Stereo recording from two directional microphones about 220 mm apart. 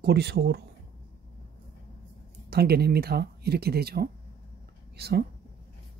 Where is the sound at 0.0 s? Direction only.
50° right (ahead or behind).